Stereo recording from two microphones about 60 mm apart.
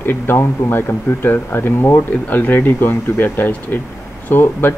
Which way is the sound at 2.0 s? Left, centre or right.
Left.